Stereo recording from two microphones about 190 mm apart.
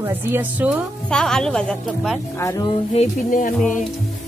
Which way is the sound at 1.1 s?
5° left (ahead or behind).